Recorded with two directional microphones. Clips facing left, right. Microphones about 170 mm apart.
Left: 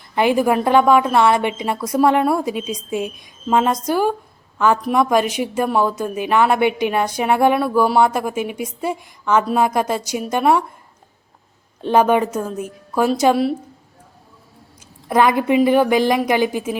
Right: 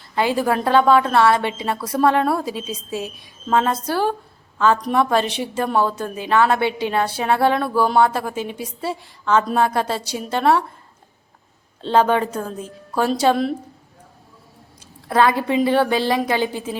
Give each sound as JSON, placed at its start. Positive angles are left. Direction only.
{"t": 0.2, "sound": "a woman's voice", "side_deg": 15}
{"t": 11.8, "sound": "a woman's voice", "side_deg": 15}
{"t": 15.1, "sound": "a woman's voice", "side_deg": 15}